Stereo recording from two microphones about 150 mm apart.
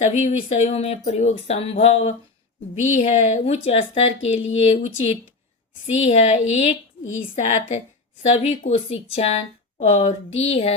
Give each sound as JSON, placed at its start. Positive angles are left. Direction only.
{"t": 0.0, "sound": "speech", "side_deg": 55}